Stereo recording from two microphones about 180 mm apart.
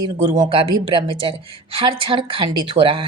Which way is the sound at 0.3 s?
25° right (ahead or behind).